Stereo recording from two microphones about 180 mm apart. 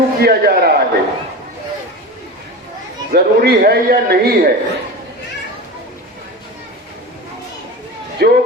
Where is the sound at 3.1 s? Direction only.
60° right (ahead or behind).